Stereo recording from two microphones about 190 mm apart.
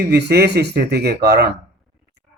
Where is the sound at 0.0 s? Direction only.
60° right (ahead or behind).